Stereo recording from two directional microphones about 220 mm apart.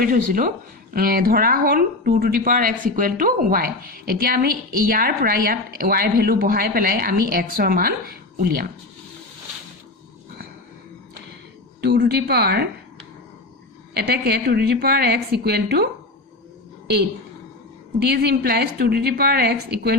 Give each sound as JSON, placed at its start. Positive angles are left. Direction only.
{"t": 0.0, "sound": "speech", "side_deg": -40}
{"t": 11.8, "sound": "a woman's voice", "side_deg": -50}
{"t": 13.9, "sound": "a woman's voice", "side_deg": -45}
{"t": 18.0, "sound": "a woman's voice", "side_deg": -45}